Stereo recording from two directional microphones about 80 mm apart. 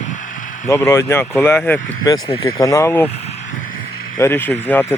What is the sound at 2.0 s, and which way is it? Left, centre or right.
Speech, left.